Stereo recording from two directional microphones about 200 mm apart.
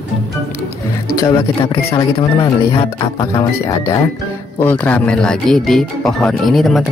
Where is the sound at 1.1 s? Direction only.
20° left (ahead or behind).